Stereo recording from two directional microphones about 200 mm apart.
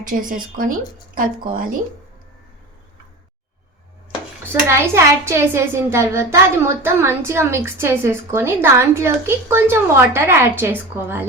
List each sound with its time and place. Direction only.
0.0 s speech: 40° right (ahead or behind)
4.7 s a woman's voice: 15° right (ahead or behind)